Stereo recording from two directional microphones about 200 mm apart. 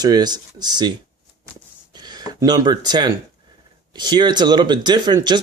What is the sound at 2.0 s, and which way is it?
Speech, 20° right (ahead or behind).